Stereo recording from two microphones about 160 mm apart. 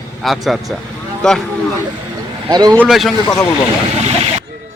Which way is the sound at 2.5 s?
25° right (ahead or behind).